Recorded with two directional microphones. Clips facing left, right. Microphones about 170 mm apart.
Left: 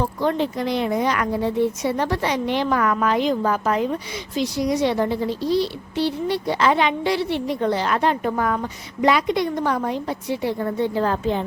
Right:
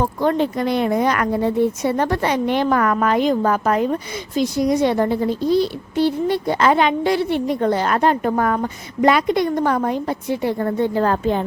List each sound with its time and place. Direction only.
0.0 s a woman's voice: 50° right (ahead or behind)